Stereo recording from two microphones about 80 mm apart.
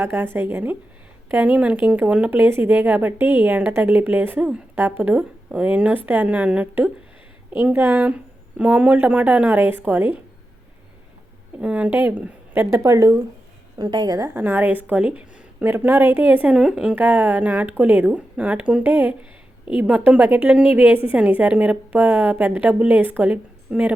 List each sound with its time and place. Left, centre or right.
0.0 s a woman's voice: right
4.4 s a woman's voice: centre
4.7 s speech: right
11.6 s a woman's voice: centre
12.5 s a woman's voice: right
13.7 s a woman's voice: right
14.3 s speech: right
16.6 s a woman's voice: centre
16.9 s speech: right